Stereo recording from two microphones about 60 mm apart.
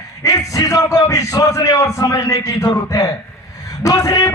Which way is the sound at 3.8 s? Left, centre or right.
Left.